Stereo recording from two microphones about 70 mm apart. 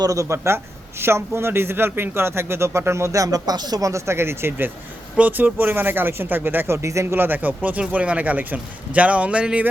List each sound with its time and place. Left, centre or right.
0.0 s a man's voice: right
0.3 s a man's voice: right
5.1 s a man's voice: right
6.8 s speech: right; by 9.6 s centre